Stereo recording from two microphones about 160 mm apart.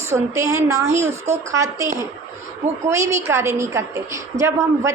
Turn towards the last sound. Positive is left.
turn(degrees=-20)  # may be behind; listen again after turning